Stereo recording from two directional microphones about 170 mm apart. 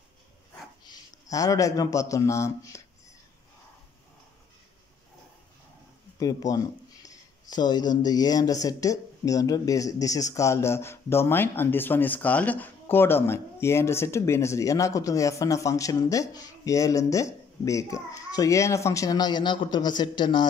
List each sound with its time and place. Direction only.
0.8 s a man's voice: 20° left (ahead or behind)
6.1 s speech: 20° left (ahead or behind)